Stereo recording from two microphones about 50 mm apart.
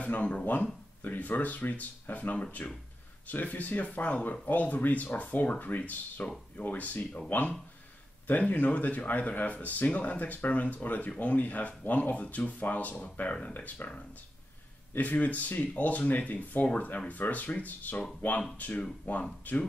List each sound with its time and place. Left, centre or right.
0.0 s speech: left
15.0 s speech: left